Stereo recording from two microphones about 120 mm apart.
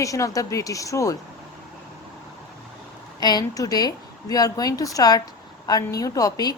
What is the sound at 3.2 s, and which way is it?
A woman's voice, 35° left (ahead or behind).